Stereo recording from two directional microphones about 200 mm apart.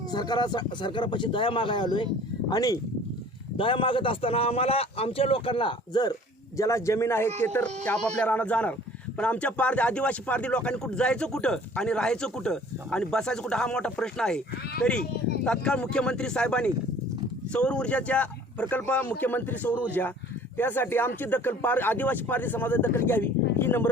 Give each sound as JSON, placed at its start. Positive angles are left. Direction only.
{"t": 0.1, "sound": "a man's voice", "side_deg": 20}